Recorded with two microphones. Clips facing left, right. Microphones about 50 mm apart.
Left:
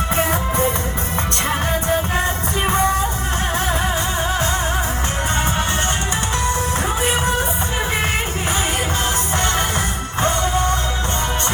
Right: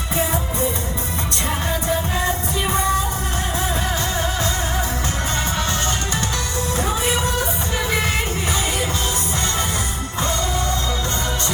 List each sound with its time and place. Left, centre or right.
0.2 s music: left
1.7 s music: left
4.2 s music: left
6.8 s music: left
10.2 s music: left